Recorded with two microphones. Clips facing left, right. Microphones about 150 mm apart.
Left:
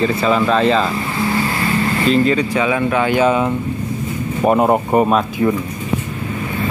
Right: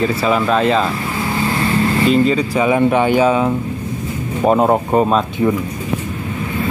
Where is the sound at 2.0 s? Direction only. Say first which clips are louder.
Left 1 dB; 5° right (ahead or behind).